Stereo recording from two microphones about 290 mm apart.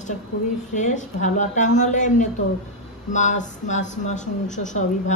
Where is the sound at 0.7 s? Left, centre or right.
Left.